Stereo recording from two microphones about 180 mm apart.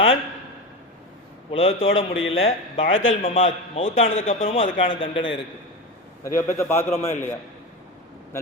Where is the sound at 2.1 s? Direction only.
90° left.